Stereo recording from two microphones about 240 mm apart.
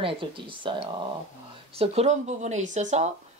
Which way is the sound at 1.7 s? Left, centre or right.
Right.